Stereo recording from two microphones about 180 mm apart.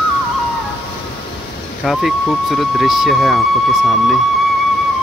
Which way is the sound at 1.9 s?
Centre (ahead or behind).